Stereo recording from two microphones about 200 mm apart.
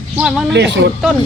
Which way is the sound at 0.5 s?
60° right (ahead or behind).